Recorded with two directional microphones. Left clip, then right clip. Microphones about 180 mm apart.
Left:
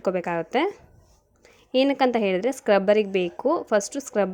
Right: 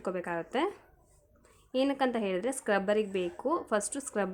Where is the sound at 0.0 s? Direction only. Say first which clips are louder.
Left 9 dB; 30° left (ahead or behind).